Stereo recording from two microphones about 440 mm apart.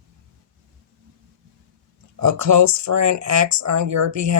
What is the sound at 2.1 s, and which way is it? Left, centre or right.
Speech, right.